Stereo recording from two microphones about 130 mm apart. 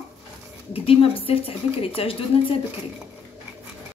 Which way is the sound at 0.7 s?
45° left (ahead or behind).